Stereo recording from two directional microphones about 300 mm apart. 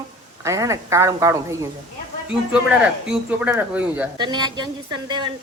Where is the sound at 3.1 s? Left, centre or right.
Centre.